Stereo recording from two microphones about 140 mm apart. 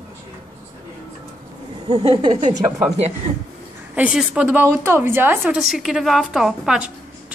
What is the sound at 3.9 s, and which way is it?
A woman's voice, 10° right (ahead or behind).